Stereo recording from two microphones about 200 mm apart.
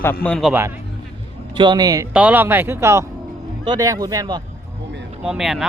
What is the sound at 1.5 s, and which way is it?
Speech, 20° right (ahead or behind).